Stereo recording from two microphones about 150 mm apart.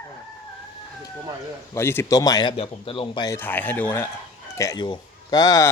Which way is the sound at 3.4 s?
15° left (ahead or behind).